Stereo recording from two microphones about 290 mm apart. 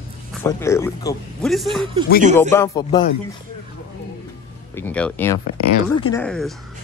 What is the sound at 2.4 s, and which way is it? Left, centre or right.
Speech, centre.